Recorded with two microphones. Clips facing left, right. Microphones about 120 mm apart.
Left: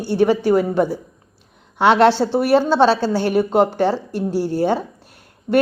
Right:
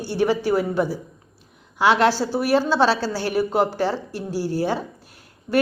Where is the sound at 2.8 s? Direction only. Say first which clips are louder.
Left 4 dB; 50° left (ahead or behind).